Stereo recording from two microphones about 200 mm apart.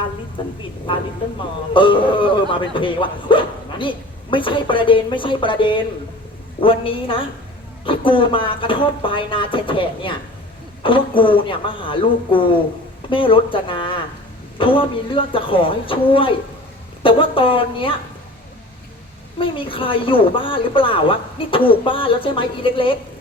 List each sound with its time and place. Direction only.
1.7 s speech: 25° left (ahead or behind)
19.4 s speech: 25° left (ahead or behind)